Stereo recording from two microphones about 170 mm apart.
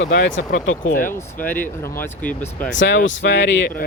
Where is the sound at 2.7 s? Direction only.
90° left.